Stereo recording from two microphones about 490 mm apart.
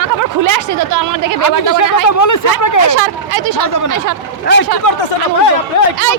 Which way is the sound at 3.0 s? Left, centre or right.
Right.